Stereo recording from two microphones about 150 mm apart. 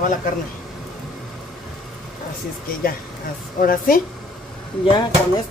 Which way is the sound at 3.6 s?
70° left (ahead or behind).